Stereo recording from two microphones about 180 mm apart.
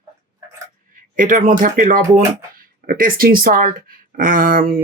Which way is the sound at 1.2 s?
50° right (ahead or behind).